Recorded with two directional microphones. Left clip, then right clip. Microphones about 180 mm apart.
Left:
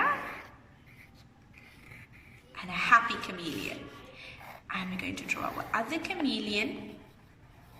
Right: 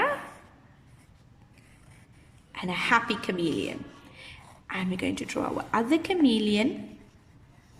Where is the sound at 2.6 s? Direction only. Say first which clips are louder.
Left 1 dB; 50° right (ahead or behind).